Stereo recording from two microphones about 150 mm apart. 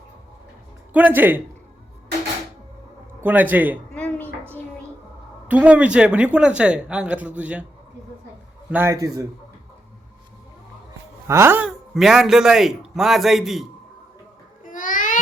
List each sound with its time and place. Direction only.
0.9 s speech: 10° right (ahead or behind)
3.2 s speech: 10° right (ahead or behind)
3.9 s a sound: 10° left (ahead or behind)
5.5 s speech: 10° right (ahead or behind)
8.7 s a man's voice: 15° right (ahead or behind)
11.3 s speech: 15° right (ahead or behind)
11.9 s a man's voice: centre (ahead or behind)
14.6 s babbling: 60° left (ahead or behind)